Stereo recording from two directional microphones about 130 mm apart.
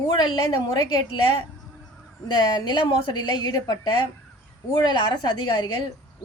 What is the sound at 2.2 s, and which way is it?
A woman's voice, 35° left (ahead or behind).